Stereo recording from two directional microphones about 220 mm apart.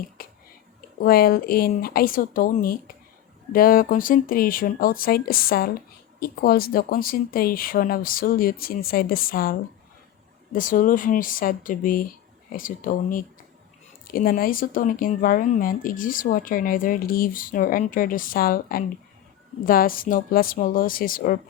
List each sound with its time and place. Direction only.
0.2 s whispering: 40° left (ahead or behind)
1.0 s speech: 45° left (ahead or behind)